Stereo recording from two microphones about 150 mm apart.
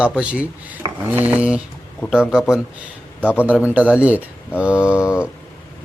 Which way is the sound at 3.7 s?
10° right (ahead or behind).